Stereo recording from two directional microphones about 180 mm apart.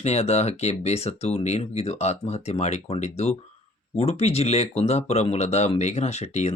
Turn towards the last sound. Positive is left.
turn(degrees=35)  # may be behind; listen again after turning